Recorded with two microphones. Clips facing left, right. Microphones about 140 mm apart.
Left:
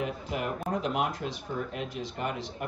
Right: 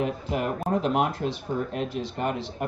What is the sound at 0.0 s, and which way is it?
Speech, 35° right (ahead or behind).